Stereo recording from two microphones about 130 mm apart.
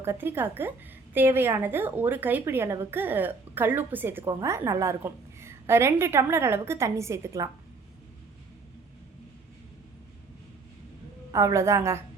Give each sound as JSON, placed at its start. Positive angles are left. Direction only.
{"t": 0.0, "sound": "a woman's voice", "side_deg": -20}
{"t": 11.3, "sound": "a woman's voice", "side_deg": -25}